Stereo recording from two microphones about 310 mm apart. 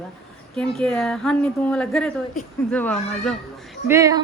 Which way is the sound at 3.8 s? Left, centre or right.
Centre.